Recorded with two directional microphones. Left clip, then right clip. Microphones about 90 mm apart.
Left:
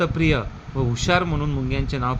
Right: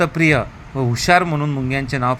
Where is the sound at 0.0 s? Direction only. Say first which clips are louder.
Right 6 dB; 35° right (ahead or behind).